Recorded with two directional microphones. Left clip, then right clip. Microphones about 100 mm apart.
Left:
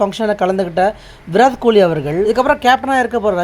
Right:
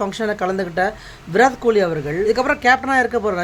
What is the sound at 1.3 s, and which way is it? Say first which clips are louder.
Speech: left 4 dB; 45° left (ahead or behind).